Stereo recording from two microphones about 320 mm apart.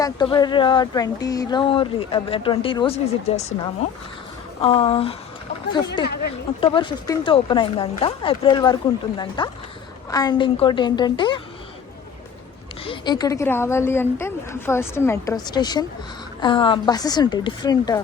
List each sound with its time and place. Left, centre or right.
0.0 s speech: centre
4.6 s speech: centre
12.8 s speech: centre